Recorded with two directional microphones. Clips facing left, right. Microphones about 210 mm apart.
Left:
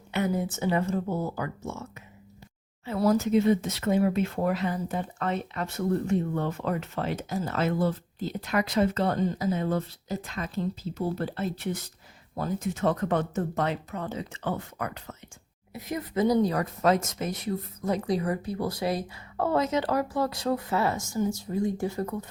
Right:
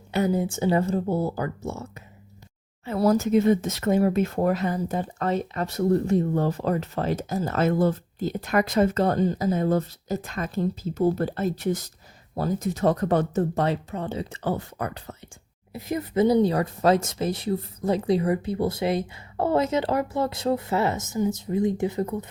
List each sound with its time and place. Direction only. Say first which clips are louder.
0.1 s speech: right 4 dB; 30° right (ahead or behind)